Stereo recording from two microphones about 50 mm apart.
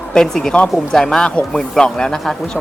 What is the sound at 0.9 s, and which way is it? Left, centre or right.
Speech, centre.